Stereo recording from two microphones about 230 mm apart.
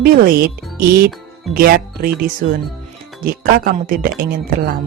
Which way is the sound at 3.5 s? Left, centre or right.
Right.